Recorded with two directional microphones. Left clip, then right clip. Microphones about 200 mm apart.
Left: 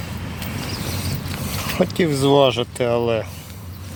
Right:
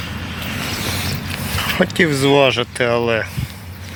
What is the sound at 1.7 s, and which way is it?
Speech, 5° left (ahead or behind).